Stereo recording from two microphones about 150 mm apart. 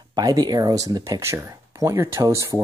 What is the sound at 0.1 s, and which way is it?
Speech, 25° right (ahead or behind).